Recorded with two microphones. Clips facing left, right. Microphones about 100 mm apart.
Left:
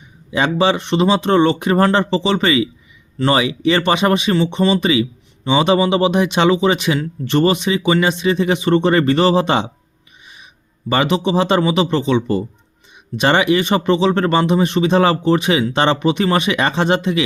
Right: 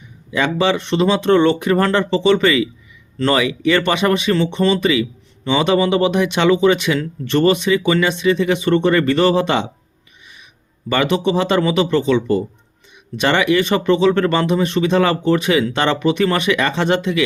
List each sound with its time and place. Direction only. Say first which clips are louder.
0.3 s speech: left 1 dB; 25° left (ahead or behind)
4.8 s speech: even; 25° left (ahead or behind)
10.8 s speech: even; 25° left (ahead or behind)